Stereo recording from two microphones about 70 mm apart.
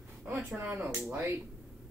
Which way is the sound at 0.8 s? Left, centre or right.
Right.